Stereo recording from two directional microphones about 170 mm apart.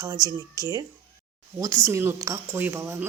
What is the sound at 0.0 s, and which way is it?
A woman's voice, 20° right (ahead or behind).